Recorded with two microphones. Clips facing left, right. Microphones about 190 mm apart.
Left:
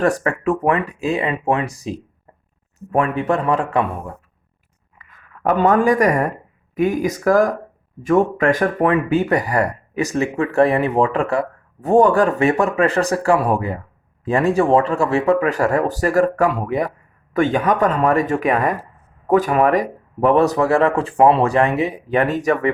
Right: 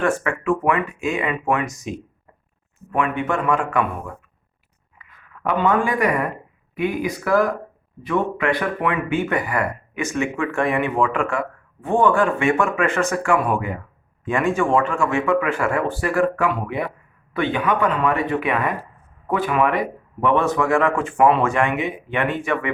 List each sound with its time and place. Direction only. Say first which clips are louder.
0.0 s speech: left 3 dB; 40° left (ahead or behind)
4.9 s speech: left 1 dB; 45° left (ahead or behind)